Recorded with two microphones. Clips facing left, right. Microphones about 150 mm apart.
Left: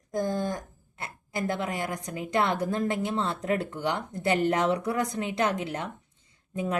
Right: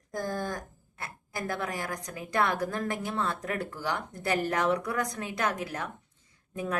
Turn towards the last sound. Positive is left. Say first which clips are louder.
# left 3 dB
turn(degrees=20)  # may be behind; listen again after turning